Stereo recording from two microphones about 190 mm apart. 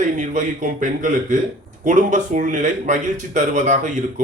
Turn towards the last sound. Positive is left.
turn(degrees=-40)  # may be behind; listen again after turning